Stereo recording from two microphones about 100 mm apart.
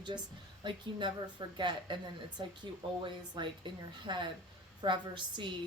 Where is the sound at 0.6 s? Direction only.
50° right (ahead or behind).